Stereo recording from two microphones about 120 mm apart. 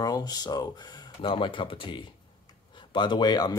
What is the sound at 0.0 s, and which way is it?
Speech, 35° left (ahead or behind).